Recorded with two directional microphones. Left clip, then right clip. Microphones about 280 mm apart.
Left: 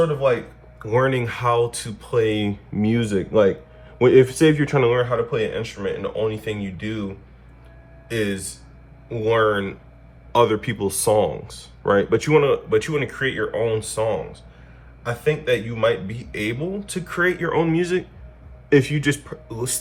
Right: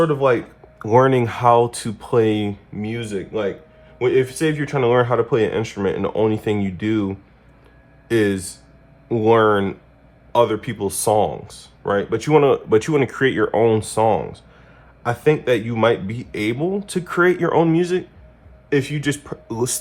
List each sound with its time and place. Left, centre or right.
0.8 s speech: centre
4.9 s speech: right
8.1 s speech: right
15.2 s speech: centre